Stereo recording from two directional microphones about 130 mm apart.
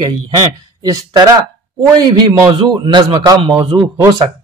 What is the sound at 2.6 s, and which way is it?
Speech, 35° right (ahead or behind).